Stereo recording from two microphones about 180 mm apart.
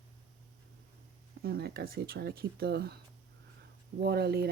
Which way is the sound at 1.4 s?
60° right (ahead or behind).